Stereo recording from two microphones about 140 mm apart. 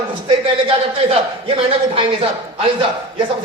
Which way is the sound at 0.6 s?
40° right (ahead or behind).